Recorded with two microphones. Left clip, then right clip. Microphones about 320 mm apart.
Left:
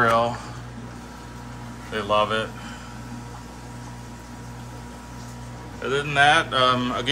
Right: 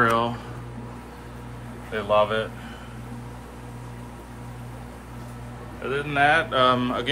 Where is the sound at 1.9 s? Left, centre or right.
Centre.